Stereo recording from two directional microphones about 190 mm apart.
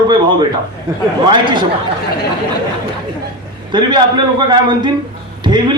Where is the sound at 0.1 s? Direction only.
25° right (ahead or behind).